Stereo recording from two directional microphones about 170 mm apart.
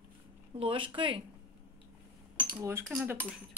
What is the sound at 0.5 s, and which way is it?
Speech, 30° right (ahead or behind).